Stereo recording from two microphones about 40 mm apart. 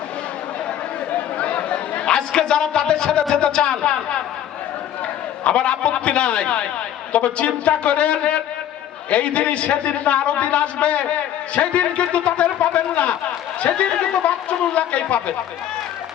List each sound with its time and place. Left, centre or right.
1.4 s a sound: left
2.0 s speech: centre
5.5 s a man's voice: left